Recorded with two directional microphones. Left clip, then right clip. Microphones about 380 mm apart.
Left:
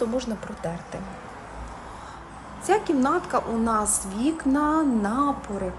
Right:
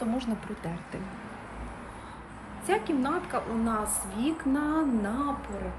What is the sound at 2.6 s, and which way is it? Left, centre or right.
Speech, centre.